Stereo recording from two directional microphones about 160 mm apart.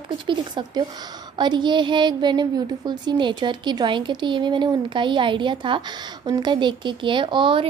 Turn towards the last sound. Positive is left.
turn(degrees=-30)  # may be behind; listen again after turning